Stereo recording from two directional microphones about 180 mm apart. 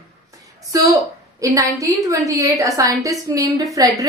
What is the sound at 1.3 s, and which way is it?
A woman's voice, 20° right (ahead or behind).